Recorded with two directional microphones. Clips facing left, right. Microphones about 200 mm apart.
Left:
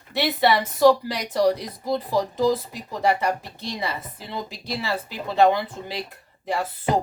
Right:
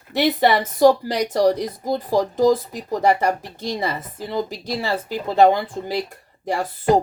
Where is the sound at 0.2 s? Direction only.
40° right (ahead or behind).